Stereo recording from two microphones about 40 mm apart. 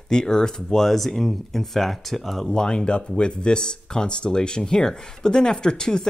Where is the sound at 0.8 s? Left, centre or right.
Centre.